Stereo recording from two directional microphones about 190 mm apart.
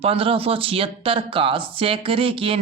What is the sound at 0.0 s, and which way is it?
Speech, 30° right (ahead or behind).